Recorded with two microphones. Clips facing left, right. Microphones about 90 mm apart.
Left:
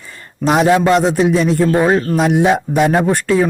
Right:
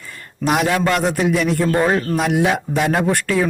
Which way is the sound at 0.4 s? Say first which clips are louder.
Left 5 dB; 30° left (ahead or behind).